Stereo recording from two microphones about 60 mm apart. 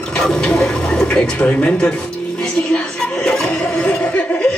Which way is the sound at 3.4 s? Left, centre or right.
Centre.